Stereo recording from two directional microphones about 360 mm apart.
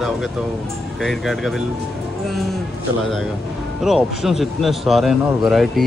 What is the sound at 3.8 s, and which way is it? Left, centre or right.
Speech, centre.